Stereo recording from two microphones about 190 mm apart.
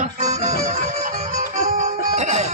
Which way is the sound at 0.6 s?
40° right (ahead or behind).